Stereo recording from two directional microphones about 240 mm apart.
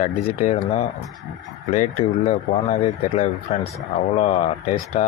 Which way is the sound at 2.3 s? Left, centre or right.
Left.